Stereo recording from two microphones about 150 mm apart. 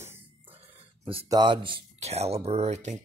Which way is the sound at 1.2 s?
30° right (ahead or behind).